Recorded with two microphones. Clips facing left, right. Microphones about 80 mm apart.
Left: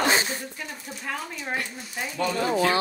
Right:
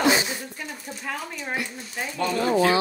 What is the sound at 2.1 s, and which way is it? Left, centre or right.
Speech, right.